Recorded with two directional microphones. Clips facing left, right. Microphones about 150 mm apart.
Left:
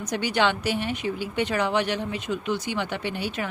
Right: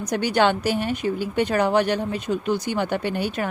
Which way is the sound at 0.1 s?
45° right (ahead or behind).